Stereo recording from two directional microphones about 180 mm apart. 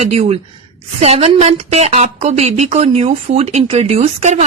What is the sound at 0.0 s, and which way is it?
Speech, 35° right (ahead or behind).